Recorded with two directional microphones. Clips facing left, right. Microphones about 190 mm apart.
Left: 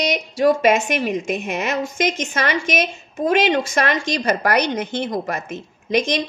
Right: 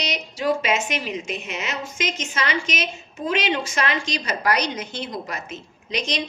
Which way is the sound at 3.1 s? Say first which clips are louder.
Left 7 dB; 50° left (ahead or behind).